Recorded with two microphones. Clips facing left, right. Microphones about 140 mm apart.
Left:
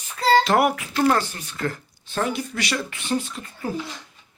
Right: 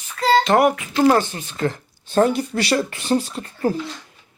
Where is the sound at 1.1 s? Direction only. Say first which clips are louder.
Right 5 dB; 25° right (ahead or behind).